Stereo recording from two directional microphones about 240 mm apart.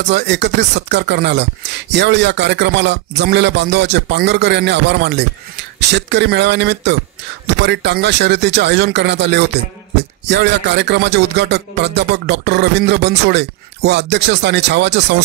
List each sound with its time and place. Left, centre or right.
0.0 s speech: right